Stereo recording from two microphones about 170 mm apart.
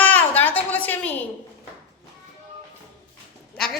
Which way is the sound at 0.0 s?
10° left (ahead or behind).